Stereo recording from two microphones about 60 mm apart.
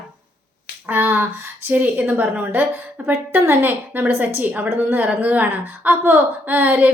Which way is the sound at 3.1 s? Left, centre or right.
Right.